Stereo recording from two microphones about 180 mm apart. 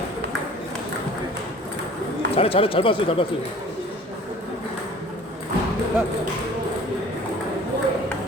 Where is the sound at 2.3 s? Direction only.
30° left (ahead or behind).